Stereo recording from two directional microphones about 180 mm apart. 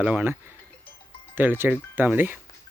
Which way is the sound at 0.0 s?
10° right (ahead or behind).